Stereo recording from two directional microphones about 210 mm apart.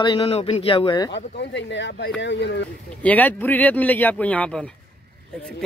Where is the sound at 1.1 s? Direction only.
55° left (ahead or behind).